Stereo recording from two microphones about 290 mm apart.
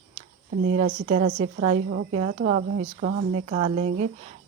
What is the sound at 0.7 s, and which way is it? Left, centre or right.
Speech, right.